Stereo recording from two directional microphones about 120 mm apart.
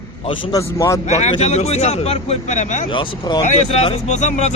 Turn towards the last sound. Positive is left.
turn(degrees=75)  # may be behind; listen again after turning